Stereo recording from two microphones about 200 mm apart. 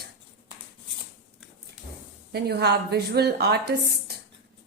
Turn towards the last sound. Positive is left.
turn(degrees=-55)  # may be behind; listen again after turning